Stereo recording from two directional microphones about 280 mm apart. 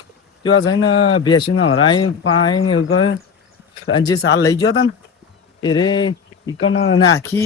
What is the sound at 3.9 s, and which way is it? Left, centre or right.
Speech, centre.